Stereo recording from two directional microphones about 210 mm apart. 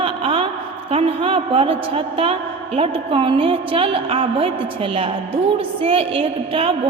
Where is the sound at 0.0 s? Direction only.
25° right (ahead or behind).